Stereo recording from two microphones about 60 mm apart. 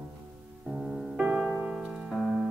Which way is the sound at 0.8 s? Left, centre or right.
Centre.